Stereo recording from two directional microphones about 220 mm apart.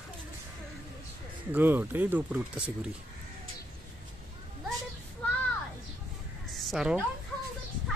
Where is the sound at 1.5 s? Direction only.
10° right (ahead or behind).